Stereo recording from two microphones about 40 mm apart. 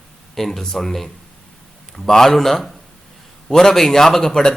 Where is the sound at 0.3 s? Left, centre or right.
Centre.